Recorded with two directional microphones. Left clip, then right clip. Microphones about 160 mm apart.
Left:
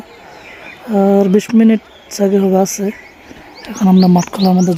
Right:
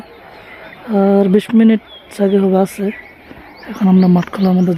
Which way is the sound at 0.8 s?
5° left (ahead or behind).